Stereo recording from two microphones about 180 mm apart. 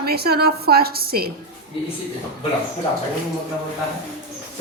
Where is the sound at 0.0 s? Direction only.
60° right (ahead or behind).